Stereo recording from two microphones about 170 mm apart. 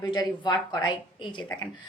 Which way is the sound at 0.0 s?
25° left (ahead or behind).